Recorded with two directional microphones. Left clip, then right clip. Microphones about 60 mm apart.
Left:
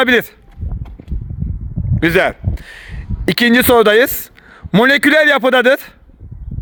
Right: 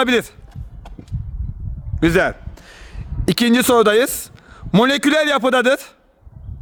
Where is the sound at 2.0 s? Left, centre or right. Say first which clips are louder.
Left 3 dB; centre.